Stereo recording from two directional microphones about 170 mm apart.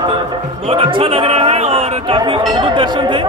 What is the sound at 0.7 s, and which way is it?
A man's voice, 30° right (ahead or behind).